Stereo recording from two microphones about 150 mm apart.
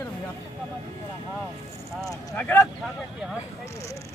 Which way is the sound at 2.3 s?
10° left (ahead or behind).